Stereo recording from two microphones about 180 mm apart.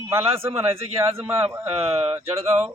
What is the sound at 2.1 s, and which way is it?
Speech, 15° right (ahead or behind).